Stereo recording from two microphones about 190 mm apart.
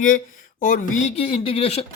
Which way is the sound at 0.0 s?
45° left (ahead or behind).